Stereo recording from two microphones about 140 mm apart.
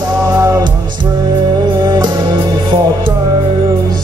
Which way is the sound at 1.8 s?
30° right (ahead or behind).